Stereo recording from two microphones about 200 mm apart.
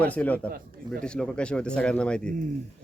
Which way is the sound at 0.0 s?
10° left (ahead or behind).